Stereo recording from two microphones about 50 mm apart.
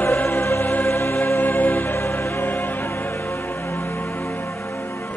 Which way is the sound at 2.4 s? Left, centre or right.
Left.